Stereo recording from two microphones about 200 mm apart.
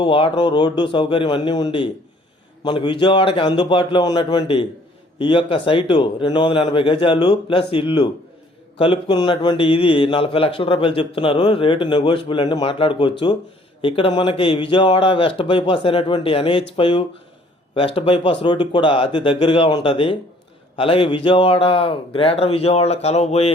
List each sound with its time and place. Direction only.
0.0 s speech: 25° left (ahead or behind)